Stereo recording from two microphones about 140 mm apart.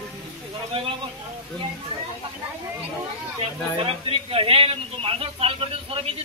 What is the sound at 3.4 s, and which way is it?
A man's voice, 45° right (ahead or behind).